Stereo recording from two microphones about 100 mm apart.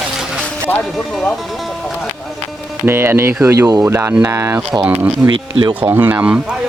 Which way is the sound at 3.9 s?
25° right (ahead or behind).